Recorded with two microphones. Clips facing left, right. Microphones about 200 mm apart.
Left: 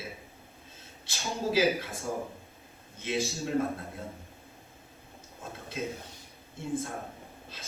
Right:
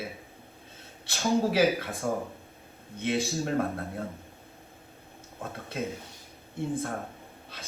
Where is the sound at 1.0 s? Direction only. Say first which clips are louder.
Right 7 dB; 55° right (ahead or behind).